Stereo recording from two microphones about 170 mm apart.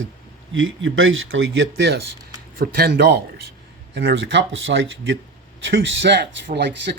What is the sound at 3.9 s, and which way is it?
Speech, 90° right.